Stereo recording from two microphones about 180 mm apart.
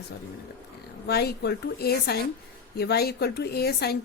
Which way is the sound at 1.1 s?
65° left (ahead or behind).